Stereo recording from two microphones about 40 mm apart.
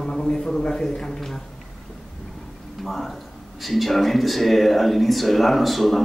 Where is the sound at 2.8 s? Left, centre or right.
Centre.